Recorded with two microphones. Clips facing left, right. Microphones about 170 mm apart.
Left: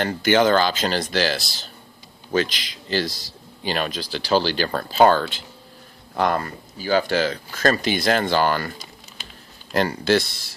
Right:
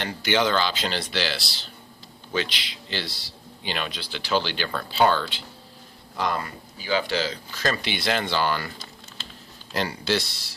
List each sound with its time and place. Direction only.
0.0 s a man's voice: 45° left (ahead or behind)
9.2 s typing: 15° left (ahead or behind)
9.7 s a man's voice: 50° left (ahead or behind)